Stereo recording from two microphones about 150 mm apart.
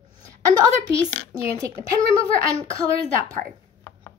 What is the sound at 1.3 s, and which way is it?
Speech, 20° right (ahead or behind).